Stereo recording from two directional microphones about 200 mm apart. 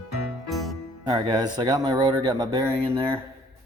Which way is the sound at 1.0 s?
20° right (ahead or behind).